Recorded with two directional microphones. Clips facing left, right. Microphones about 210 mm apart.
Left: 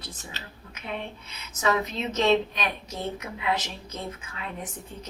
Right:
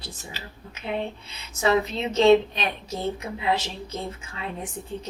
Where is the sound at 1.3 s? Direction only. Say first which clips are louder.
Right 4 dB; 30° right (ahead or behind).